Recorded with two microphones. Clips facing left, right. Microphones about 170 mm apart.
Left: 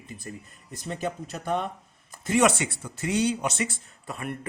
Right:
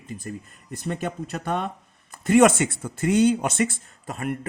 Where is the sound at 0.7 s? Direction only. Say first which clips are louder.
Right 3 dB; 55° right (ahead or behind).